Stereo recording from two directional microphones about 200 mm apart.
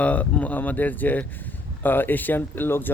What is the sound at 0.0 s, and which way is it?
Speech, 5° left (ahead or behind).